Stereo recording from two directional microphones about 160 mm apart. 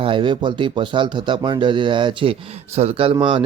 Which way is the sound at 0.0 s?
30° right (ahead or behind).